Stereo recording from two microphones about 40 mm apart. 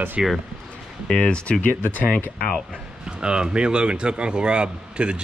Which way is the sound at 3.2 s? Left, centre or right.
Right.